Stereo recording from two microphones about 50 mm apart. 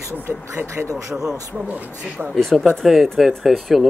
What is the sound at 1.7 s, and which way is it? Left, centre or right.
Speech, right.